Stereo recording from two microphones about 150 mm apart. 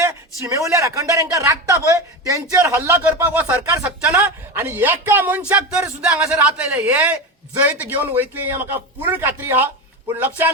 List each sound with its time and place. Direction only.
0.4 s a man's voice: 20° right (ahead or behind)